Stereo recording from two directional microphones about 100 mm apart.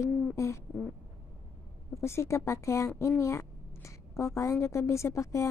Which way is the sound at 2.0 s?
30° left (ahead or behind).